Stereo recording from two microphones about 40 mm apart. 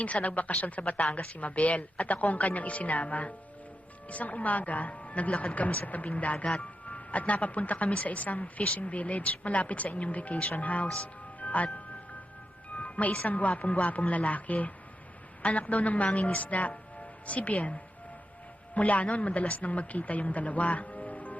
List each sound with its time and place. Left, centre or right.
0.0 s a woman's voice: left
11.0 s music: left
12.7 s chime: left
13.3 s a woman's voice: left